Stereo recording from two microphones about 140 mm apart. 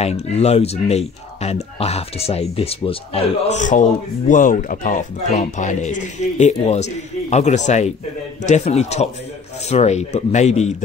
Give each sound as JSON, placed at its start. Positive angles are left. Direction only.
{"t": 0.0, "sound": "speech", "side_deg": 50}
{"t": 4.3, "sound": "speech", "side_deg": 75}
{"t": 5.3, "sound": "speech", "side_deg": 55}